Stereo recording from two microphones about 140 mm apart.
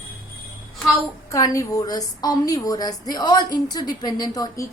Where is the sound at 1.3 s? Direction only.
25° left (ahead or behind).